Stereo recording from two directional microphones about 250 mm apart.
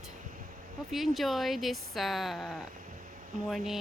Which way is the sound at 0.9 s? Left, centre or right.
Centre.